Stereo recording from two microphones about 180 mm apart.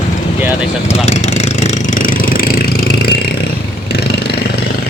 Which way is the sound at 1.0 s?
35° left (ahead or behind).